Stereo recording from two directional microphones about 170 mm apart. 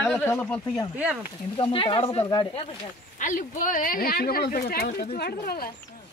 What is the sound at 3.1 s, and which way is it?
Speech, 50° left (ahead or behind).